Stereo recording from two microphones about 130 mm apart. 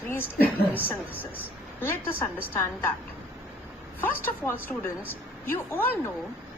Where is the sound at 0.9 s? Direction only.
15° left (ahead or behind).